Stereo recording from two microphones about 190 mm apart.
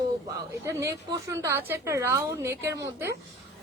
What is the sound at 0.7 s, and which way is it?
A woman's voice, 15° right (ahead or behind).